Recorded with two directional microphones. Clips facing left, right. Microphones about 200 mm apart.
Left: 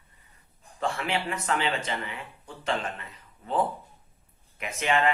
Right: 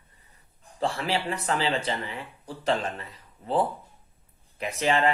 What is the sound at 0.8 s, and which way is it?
Speech, 35° right (ahead or behind).